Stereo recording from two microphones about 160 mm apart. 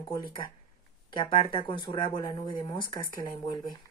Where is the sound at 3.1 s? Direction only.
60° right (ahead or behind).